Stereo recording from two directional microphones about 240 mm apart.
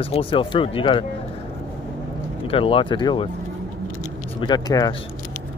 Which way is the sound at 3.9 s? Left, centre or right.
Left.